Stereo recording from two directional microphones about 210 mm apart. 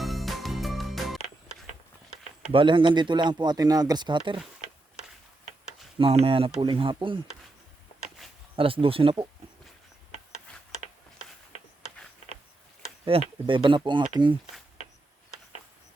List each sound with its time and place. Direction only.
0.0 s music: centre (ahead or behind)
2.4 s speech: 25° right (ahead or behind)
6.0 s speech: 25° right (ahead or behind)
8.5 s speech: 25° right (ahead or behind)
13.1 s speech: 25° right (ahead or behind)